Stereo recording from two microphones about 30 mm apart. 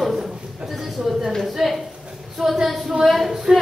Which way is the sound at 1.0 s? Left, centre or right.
Centre.